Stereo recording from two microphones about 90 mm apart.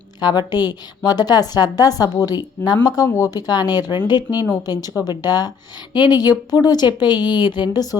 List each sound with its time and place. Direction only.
0.2 s a woman's voice: 55° left (ahead or behind)